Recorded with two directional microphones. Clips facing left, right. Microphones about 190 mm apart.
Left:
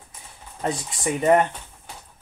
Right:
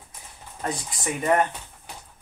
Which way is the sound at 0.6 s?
25° left (ahead or behind).